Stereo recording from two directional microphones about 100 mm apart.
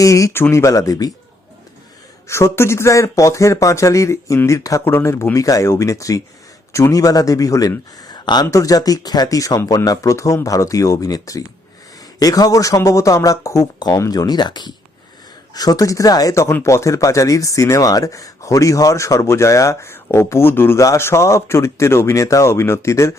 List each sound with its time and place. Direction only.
0.0 s speech: 35° left (ahead or behind)
2.2 s speech: 30° left (ahead or behind)
7.9 s a sound: 45° left (ahead or behind)
8.4 s speech: 35° left (ahead or behind)